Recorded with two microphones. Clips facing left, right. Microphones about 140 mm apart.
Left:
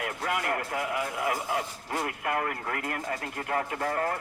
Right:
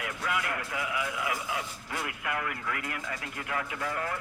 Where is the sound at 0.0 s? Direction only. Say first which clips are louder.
Left 2 dB; 45° left (ahead or behind).